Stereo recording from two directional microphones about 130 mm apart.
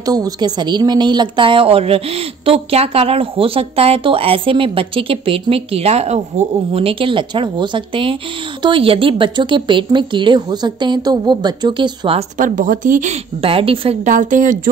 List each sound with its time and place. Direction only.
0.0 s a woman's voice: 30° right (ahead or behind)
12.4 s speech: 80° right
13.4 s a woman's voice: 45° right (ahead or behind)
14.0 s speech: 80° right